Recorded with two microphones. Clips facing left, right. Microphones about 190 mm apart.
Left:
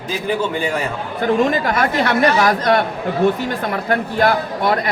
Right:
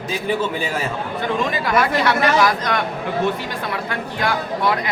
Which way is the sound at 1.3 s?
50° left (ahead or behind).